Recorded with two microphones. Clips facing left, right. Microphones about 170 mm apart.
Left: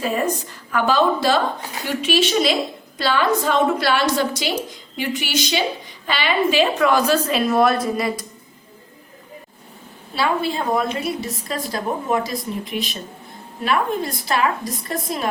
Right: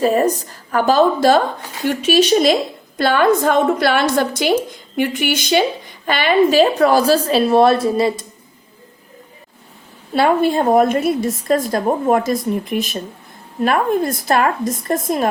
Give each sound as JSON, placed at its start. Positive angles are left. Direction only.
{"t": 0.0, "sound": "a woman's voice", "side_deg": -40}
{"t": 10.2, "sound": "a woman's voice", "side_deg": -50}